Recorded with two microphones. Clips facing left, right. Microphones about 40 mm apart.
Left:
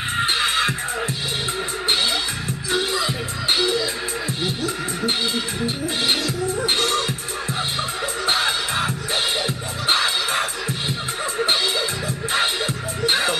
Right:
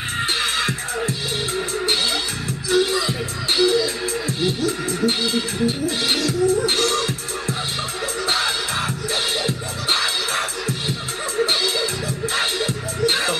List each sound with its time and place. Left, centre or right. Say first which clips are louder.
0.2 s music: left 2 dB; centre
2.7 s music: right 3 dB; centre
8.3 s music: left 1 dB; centre
12.4 s music: left 1 dB; left